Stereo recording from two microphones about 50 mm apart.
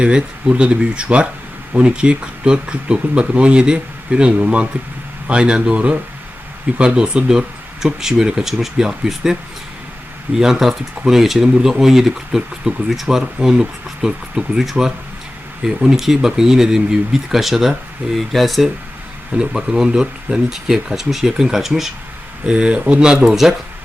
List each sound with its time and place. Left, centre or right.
0.0 s speech: centre
19.3 s speech: centre
22.4 s speech: right
23.3 s speech: centre